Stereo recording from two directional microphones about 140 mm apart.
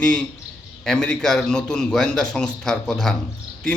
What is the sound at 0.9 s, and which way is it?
A man's voice, 10° left (ahead or behind).